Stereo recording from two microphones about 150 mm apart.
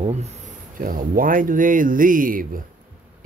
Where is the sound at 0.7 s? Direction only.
70° right (ahead or behind).